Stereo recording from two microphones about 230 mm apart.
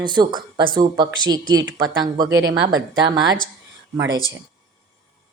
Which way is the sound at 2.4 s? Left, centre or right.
Right.